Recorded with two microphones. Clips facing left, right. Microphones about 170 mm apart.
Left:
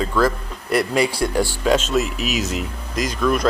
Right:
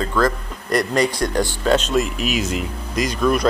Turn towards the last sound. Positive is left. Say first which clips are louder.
# right 1 dB
turn(degrees=0)  # may be behind; listen again after turning